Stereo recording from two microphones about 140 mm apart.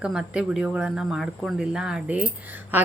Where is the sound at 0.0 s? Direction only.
5° right (ahead or behind).